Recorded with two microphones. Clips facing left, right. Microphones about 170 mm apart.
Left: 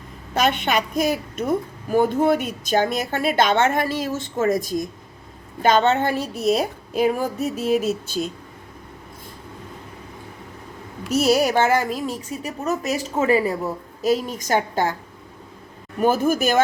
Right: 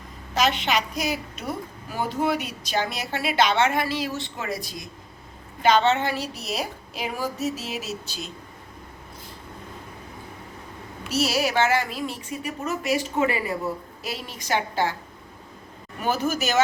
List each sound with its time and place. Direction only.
0.3 s a woman's voice: 55° left (ahead or behind)
11.0 s a woman's voice: 50° left (ahead or behind)
16.0 s a woman's voice: 50° left (ahead or behind)